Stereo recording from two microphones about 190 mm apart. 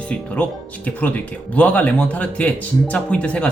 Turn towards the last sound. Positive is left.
turn(degrees=5)  # may be behind; listen again after turning